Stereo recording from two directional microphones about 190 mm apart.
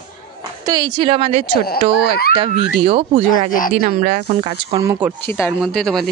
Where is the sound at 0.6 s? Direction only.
20° right (ahead or behind).